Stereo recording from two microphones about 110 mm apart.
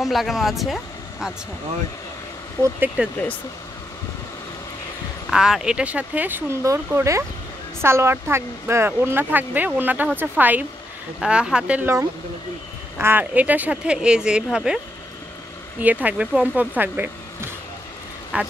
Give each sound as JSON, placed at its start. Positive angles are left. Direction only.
{"t": 0.0, "sound": "speech", "side_deg": 0}
{"t": 3.0, "sound": "speech", "side_deg": -15}
{"t": 5.3, "sound": "speech", "side_deg": -5}
{"t": 11.8, "sound": "speech", "side_deg": -25}
{"t": 15.8, "sound": "speech", "side_deg": -15}